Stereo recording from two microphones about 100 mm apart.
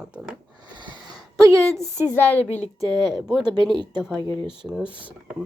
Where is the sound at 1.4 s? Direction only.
30° right (ahead or behind).